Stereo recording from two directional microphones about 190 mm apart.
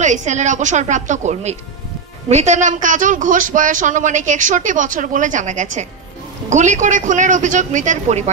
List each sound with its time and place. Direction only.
0.0 s speech: 40° right (ahead or behind)